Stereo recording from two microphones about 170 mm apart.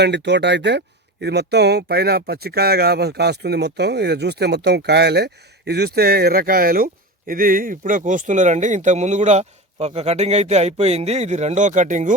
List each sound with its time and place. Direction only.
0.0 s speech: 90° right
1.2 s speech: 75° right (ahead or behind); by 12.1 s 45° right (ahead or behind)